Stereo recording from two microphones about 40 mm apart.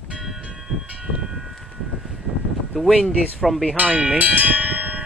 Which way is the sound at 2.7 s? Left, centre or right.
Centre.